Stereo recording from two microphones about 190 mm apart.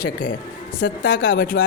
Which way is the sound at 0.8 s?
60° left (ahead or behind).